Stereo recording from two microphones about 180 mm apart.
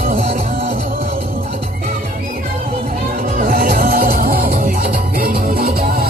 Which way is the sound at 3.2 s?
50° right (ahead or behind).